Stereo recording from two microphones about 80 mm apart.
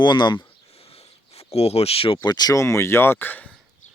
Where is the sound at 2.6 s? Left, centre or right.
Left.